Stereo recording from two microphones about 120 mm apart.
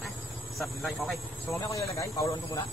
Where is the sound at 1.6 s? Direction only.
25° left (ahead or behind).